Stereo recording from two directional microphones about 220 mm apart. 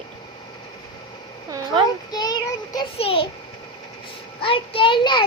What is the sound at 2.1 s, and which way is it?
Child singing, 15° left (ahead or behind).